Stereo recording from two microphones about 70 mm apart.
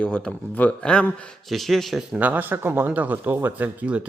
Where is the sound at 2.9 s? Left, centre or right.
Right.